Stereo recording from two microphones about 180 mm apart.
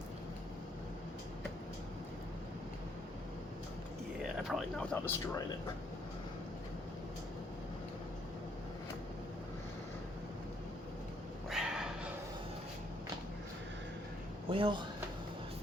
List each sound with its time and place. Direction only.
4.2 s speech: centre (ahead or behind)
11.4 s cat: centre (ahead or behind)
14.5 s speech: 25° right (ahead or behind)